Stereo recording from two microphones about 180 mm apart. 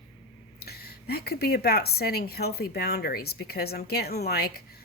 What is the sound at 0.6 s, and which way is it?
Speech, 60° left (ahead or behind).